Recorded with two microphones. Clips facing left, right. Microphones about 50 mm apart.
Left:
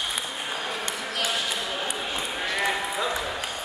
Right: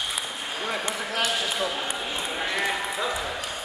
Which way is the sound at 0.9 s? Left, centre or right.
Right.